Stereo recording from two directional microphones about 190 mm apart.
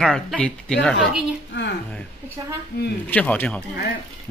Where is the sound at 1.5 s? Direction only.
70° left (ahead or behind).